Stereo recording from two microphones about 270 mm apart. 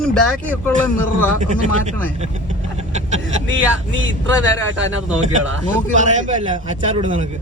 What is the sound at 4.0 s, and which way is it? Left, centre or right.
Speech, right.